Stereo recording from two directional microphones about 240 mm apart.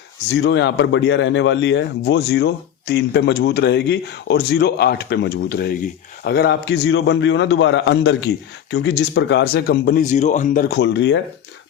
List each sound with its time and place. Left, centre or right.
0.3 s speech: left